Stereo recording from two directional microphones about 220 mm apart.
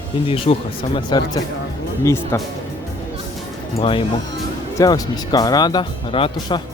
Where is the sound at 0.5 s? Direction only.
30° left (ahead or behind).